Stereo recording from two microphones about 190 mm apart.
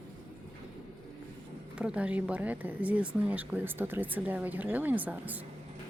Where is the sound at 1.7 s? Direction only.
5° right (ahead or behind).